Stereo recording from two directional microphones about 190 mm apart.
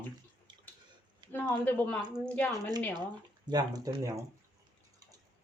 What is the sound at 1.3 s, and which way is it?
Speech, 10° left (ahead or behind).